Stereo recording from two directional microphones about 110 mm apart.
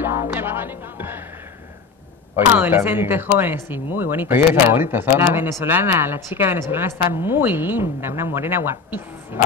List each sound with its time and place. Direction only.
0.0 s music: 20° right (ahead or behind)
2.3 s speech: 20° right (ahead or behind)